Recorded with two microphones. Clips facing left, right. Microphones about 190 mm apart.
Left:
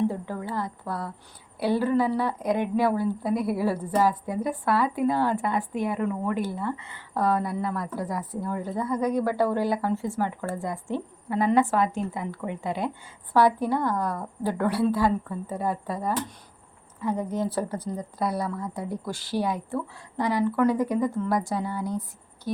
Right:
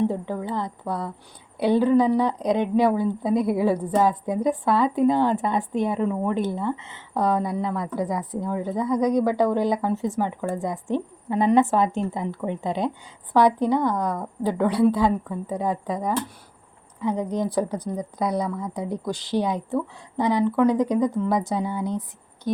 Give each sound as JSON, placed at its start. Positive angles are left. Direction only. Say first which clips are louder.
{"t": 0.0, "sound": "a woman's voice", "louder": "right 3 dB", "side_deg": -20}